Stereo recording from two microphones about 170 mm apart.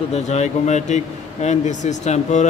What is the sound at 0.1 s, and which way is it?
A man's voice, 40° left (ahead or behind).